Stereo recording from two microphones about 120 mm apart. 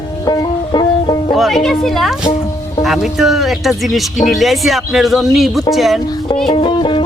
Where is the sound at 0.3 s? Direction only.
35° left (ahead or behind).